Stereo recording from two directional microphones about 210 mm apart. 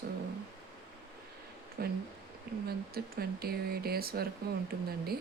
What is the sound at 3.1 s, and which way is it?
Speech, 45° right (ahead or behind).